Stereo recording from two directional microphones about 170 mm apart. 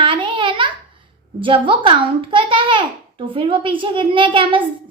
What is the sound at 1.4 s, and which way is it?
A child's voice, 30° right (ahead or behind).